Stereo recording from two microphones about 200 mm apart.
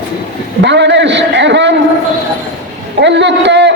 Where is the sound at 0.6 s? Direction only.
60° right (ahead or behind).